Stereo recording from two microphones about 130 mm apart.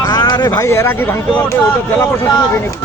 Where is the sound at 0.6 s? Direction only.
20° left (ahead or behind).